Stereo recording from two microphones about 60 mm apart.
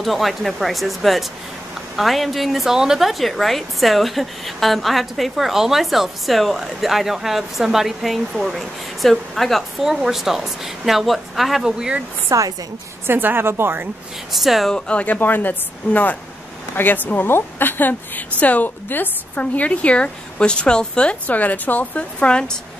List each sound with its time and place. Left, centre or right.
0.0 s a woman's voice: centre
12.3 s speech: right
13.0 s a woman's voice: right
14.3 s a woman's voice: centre
14.7 s a woman's voice: centre
15.1 s a woman's voice: left